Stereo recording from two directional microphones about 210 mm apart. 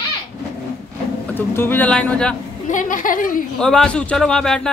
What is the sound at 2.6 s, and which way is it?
Speech, 40° left (ahead or behind).